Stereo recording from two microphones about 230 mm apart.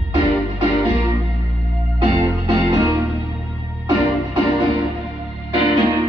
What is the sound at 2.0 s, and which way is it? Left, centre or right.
Music, right.